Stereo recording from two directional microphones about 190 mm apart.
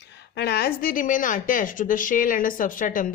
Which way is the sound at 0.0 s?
65° left (ahead or behind).